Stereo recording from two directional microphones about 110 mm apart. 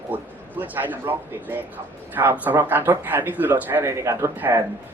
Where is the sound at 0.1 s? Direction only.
15° right (ahead or behind).